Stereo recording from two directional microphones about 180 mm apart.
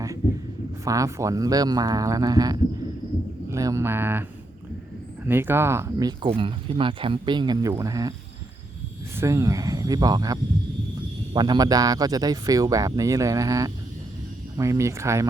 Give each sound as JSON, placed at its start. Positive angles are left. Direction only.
{"t": 0.9, "sound": "speech", "side_deg": -20}
{"t": 6.2, "sound": "speech", "side_deg": -30}
{"t": 9.1, "sound": "speech", "side_deg": -15}